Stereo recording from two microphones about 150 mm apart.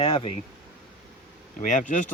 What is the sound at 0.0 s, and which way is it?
Speech, 40° left (ahead or behind).